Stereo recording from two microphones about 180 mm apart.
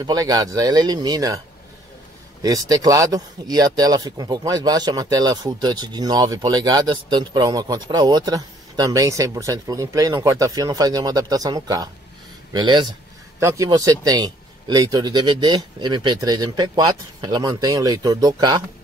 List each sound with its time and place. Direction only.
0.0 s a man's voice: 20° right (ahead or behind)
2.4 s a man's voice: 20° right (ahead or behind)